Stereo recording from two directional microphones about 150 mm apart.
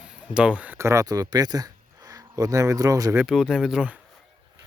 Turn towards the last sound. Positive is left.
turn(degrees=-5)  # may be behind; listen again after turning